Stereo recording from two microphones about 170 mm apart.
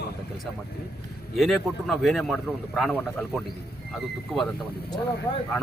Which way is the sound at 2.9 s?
10° left (ahead or behind).